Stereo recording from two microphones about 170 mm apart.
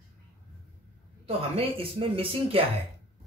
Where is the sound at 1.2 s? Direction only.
35° right (ahead or behind).